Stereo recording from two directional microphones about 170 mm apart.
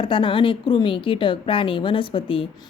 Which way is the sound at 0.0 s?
30° left (ahead or behind).